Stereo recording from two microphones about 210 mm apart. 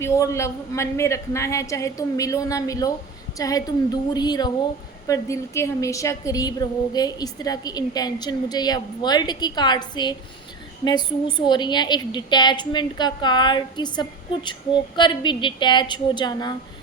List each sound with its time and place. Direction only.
0.0 s a woman's voice: 15° left (ahead or behind)